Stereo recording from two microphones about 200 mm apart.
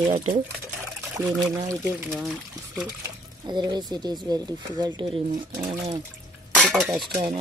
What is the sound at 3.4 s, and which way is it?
Speech, 20° right (ahead or behind).